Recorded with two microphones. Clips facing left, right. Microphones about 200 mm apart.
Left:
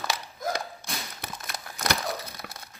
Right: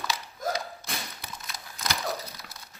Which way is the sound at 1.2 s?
55° left (ahead or behind).